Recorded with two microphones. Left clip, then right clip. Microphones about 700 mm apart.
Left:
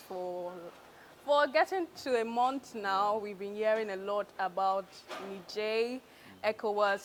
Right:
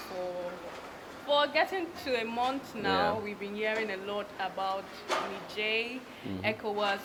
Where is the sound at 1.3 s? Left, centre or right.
Left.